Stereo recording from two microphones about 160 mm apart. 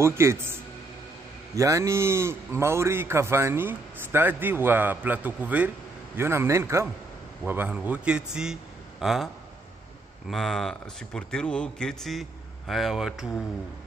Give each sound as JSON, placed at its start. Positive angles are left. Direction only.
{"t": 0.0, "sound": "a man's voice", "side_deg": -15}
{"t": 10.3, "sound": "a man's voice", "side_deg": 0}